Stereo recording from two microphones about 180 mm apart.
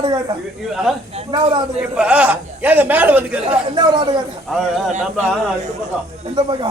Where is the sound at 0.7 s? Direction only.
Centre (ahead or behind).